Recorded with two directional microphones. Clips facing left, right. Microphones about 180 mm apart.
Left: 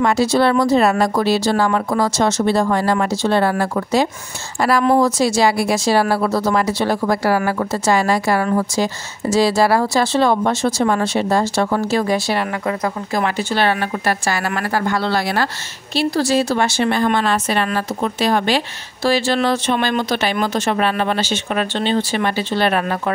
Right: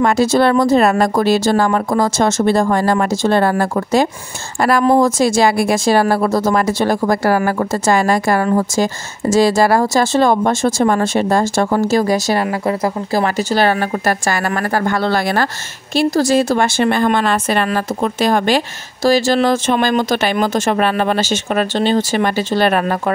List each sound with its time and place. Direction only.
0.0 s a woman's voice: 50° right (ahead or behind)